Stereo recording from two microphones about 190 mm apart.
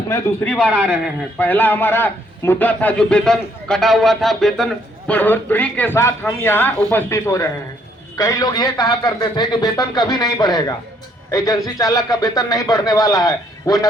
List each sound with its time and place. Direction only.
0.1 s a man's voice: 5° left (ahead or behind)
0.7 s a man's voice: 10° right (ahead or behind)
1.4 s a man's voice: 10° left (ahead or behind)